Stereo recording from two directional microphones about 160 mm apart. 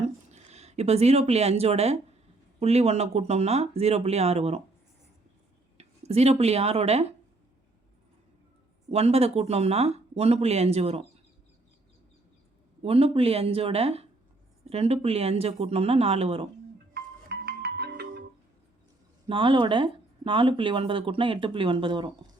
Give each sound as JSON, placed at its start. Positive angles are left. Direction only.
{"t": 0.3, "sound": "speech", "side_deg": -45}
{"t": 5.7, "sound": "speech", "side_deg": -40}
{"t": 8.9, "sound": "speech", "side_deg": -40}
{"t": 12.8, "sound": "speech", "side_deg": -40}
{"t": 16.9, "sound": "music", "side_deg": -80}
{"t": 19.3, "sound": "speech", "side_deg": -35}